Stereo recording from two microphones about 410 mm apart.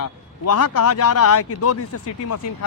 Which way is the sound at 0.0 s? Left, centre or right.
Left.